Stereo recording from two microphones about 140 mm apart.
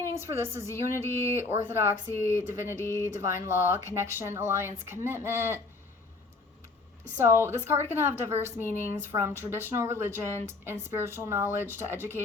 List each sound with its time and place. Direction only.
0.2 s speech: 20° right (ahead or behind)
7.2 s speech: 15° right (ahead or behind)